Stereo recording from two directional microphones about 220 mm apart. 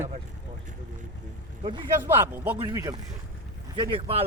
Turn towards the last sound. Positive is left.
turn(degrees=-25)  # may be behind; listen again after turning